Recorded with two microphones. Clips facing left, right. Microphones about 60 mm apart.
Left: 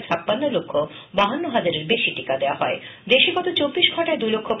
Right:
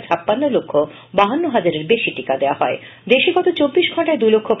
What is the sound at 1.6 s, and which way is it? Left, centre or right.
Speech, right.